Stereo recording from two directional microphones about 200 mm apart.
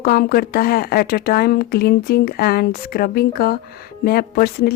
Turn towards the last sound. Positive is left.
turn(degrees=50)  # may be behind; listen again after turning